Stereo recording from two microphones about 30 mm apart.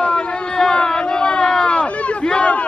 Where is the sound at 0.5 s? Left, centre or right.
Left.